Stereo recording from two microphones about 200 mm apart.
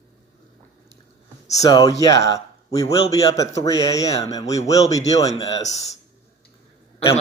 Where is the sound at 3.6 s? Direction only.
15° left (ahead or behind).